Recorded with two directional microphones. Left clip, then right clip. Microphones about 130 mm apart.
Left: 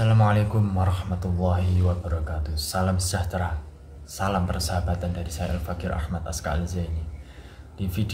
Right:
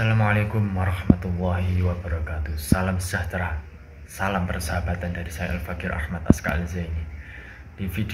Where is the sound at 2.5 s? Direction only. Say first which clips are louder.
Right 1 dB; 25° right (ahead or behind).